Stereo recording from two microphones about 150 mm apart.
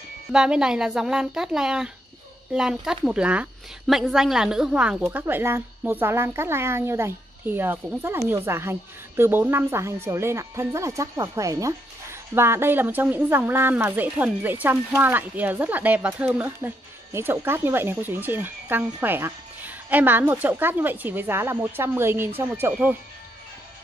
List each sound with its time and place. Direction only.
0.3 s speech: 5° right (ahead or behind)
5.2 s speech: 15° right (ahead or behind)